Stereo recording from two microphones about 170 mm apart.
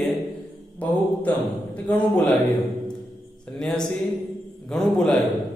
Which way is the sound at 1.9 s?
10° left (ahead or behind).